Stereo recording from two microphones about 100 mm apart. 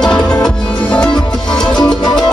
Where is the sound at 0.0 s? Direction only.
10° left (ahead or behind).